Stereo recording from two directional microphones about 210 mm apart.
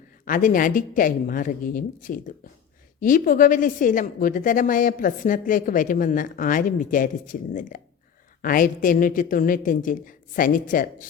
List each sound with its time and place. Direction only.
0.3 s a woman's voice: 40° left (ahead or behind)